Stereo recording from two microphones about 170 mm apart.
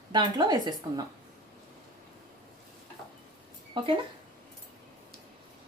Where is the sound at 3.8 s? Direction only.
30° right (ahead or behind).